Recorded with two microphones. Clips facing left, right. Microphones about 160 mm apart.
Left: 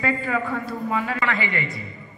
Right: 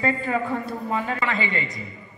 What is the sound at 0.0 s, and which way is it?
A woman's voice, 25° right (ahead or behind).